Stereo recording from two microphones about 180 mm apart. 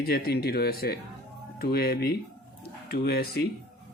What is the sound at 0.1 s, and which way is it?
Speech, 60° left (ahead or behind).